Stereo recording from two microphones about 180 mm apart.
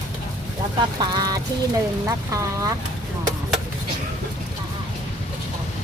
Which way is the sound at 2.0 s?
15° right (ahead or behind).